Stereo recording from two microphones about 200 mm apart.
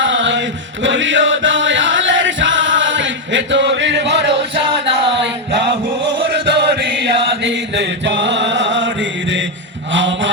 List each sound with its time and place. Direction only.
0.0 s chant: 65° right (ahead or behind)
6.3 s chant: 60° right (ahead or behind)
9.9 s mantra: 65° right (ahead or behind)